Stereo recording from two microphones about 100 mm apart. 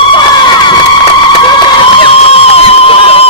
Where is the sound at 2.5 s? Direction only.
75° left (ahead or behind).